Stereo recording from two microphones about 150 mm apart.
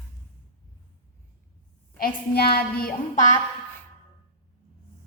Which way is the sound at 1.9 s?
85° left.